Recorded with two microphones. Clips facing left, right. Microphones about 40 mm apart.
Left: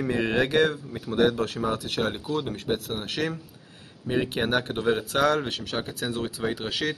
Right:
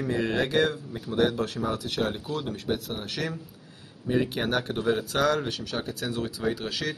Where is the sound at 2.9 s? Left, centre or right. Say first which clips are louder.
Left 3 dB; left.